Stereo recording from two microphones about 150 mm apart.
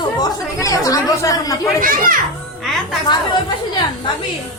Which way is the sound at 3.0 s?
30° left (ahead or behind).